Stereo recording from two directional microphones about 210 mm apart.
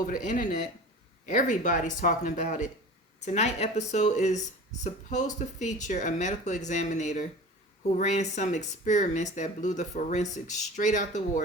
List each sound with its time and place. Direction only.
0.0 s speech: 40° left (ahead or behind)